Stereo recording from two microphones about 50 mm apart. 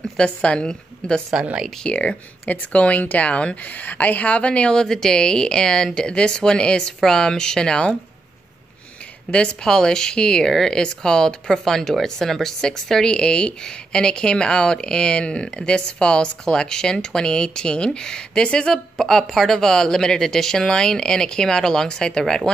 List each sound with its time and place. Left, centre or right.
0.2 s speech: centre
2.0 s speech: left
9.3 s speech: centre
13.0 s speech: centre